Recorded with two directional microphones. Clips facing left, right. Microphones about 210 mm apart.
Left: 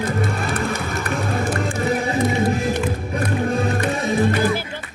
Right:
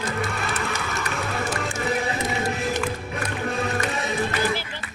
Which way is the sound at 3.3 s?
35° left (ahead or behind).